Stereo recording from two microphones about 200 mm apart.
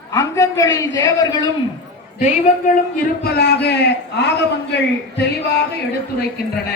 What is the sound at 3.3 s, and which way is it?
A man's voice, 55° left (ahead or behind).